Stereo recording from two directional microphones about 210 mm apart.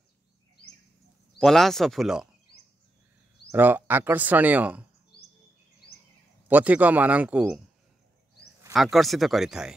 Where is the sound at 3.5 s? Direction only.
10° right (ahead or behind).